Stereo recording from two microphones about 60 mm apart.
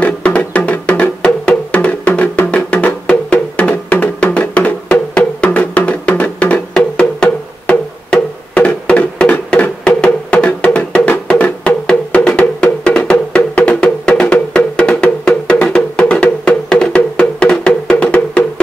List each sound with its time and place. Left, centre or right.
0.0 s music: left